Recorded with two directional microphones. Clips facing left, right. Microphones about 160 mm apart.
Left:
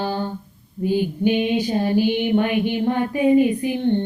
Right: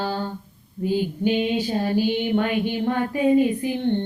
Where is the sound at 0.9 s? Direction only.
15° left (ahead or behind).